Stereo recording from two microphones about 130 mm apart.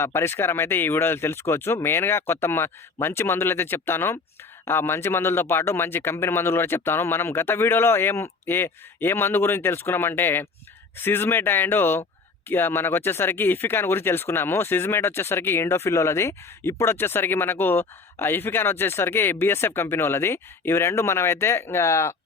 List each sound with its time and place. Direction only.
0.0 s speech: 20° left (ahead or behind)